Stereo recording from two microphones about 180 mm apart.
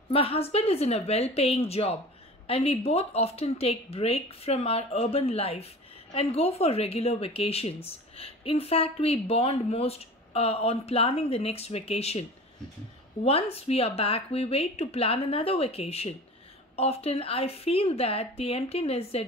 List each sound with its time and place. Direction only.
0.1 s a woman's voice: 35° left (ahead or behind)